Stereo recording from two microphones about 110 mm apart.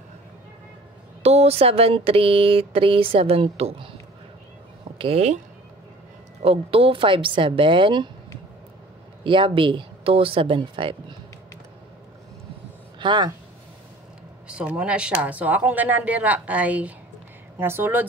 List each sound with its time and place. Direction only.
1.2 s speech: 70° right (ahead or behind)
4.9 s a sound: 55° right (ahead or behind)
6.4 s speech: 60° right (ahead or behind)
9.2 s speech: 50° right (ahead or behind)
13.0 s speech: 45° right (ahead or behind)
14.5 s speech: 10° right (ahead or behind)